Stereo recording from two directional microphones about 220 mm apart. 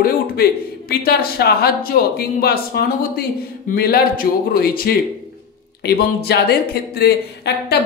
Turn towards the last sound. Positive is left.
turn(degrees=50)  # may be behind; listen again after turning